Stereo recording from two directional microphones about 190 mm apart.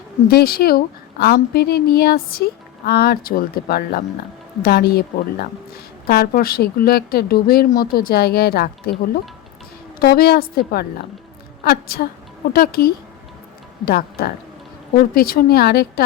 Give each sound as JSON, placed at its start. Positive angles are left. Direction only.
{"t": 0.3, "sound": "a woman's voice", "side_deg": 55}
{"t": 10.0, "sound": "a woman's voice", "side_deg": 55}